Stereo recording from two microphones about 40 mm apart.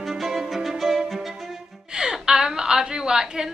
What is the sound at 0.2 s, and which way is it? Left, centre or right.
Music, centre.